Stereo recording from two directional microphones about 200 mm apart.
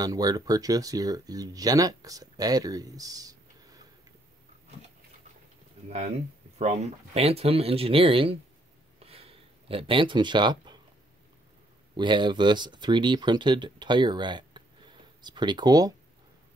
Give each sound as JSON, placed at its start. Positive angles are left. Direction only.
{"t": 0.0, "sound": "speech", "side_deg": -20}
{"t": 5.9, "sound": "speech", "side_deg": -30}
{"t": 9.0, "sound": "a sound", "side_deg": -30}
{"t": 12.0, "sound": "speech", "side_deg": -25}